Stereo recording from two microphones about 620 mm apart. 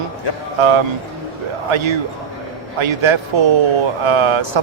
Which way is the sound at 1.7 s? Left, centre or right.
Right.